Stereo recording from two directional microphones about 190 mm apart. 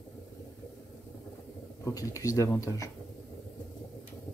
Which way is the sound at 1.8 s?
15° left (ahead or behind).